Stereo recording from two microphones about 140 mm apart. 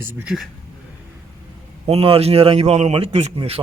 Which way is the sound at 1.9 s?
45° right (ahead or behind).